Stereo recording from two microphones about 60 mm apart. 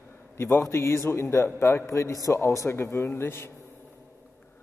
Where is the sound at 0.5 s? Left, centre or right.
Left.